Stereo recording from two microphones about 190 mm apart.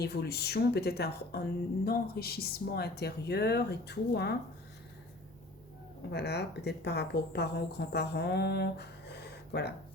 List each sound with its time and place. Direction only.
0.0 s a woman's voice: 55° left (ahead or behind)
6.1 s a woman's voice: 60° left (ahead or behind)